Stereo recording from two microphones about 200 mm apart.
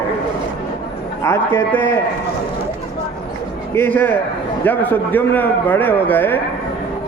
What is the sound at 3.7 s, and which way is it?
A man's voice, 10° left (ahead or behind).